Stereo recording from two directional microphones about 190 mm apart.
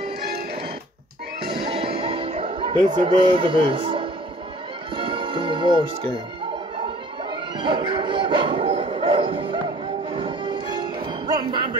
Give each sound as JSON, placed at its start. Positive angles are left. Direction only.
{"t": 1.7, "sound": "music", "side_deg": -30}
{"t": 3.0, "sound": "speech", "side_deg": -25}
{"t": 4.9, "sound": "music", "side_deg": -25}
{"t": 7.2, "sound": "speech", "side_deg": -25}
{"t": 10.1, "sound": "music", "side_deg": -25}